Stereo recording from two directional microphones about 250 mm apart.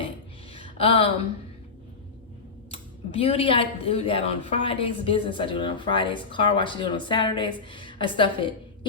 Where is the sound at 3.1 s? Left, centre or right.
Left.